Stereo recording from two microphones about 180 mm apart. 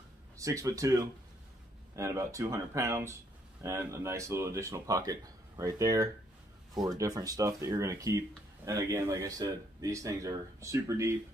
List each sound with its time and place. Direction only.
0.4 s speech: 15° right (ahead or behind)